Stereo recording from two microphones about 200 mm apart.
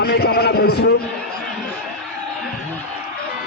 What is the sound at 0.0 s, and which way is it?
Speech, 50° left (ahead or behind).